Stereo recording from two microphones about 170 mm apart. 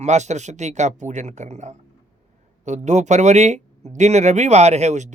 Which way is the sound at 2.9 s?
45° right (ahead or behind).